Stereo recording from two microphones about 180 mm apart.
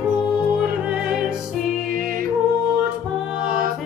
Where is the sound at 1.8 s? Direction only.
50° right (ahead or behind).